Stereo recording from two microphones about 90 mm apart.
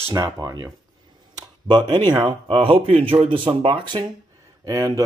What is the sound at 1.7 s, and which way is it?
Speech, 55° right (ahead or behind).